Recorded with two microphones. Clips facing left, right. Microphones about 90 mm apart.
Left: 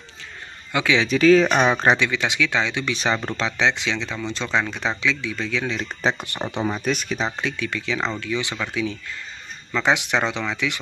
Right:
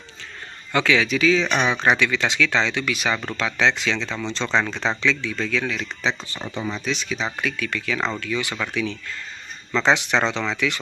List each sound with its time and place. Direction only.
0.7 s speech: 15° left (ahead or behind)
1.0 s speech: 40° left (ahead or behind)
2.0 s speech: 15° left (ahead or behind)
2.8 s speech: 30° left (ahead or behind); by 5.7 s 15° left (ahead or behind)
5.7 s speech: 35° left (ahead or behind)
6.8 s speech: 50° left (ahead or behind)
7.4 s speech: 25° left (ahead or behind)
9.8 s speech: 10° left (ahead or behind)